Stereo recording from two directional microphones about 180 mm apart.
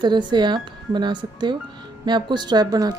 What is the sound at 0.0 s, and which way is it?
Speech, 25° right (ahead or behind).